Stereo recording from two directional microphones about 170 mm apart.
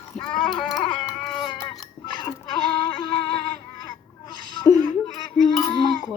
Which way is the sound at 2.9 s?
25° left (ahead or behind).